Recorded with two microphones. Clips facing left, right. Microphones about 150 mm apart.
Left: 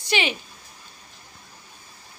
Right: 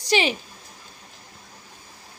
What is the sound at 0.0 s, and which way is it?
Speech, 35° right (ahead or behind).